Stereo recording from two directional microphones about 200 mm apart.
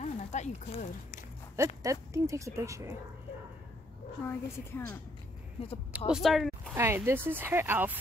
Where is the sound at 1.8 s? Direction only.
15° right (ahead or behind).